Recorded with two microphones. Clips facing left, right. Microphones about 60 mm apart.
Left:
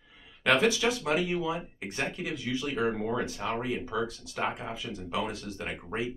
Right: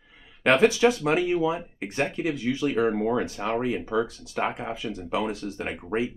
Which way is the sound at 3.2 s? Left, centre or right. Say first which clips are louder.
Right 5 dB; right.